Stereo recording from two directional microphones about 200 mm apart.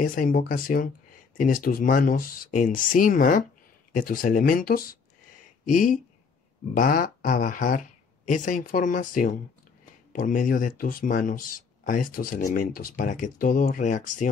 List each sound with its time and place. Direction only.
0.0 s speech: 45° left (ahead or behind)